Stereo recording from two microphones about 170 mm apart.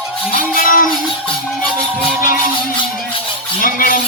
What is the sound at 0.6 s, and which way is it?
Speech, 55° left (ahead or behind).